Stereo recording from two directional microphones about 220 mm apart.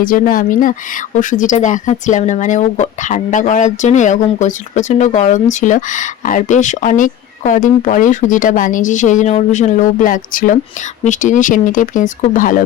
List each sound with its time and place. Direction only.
0.0 s speech: 40° left (ahead or behind)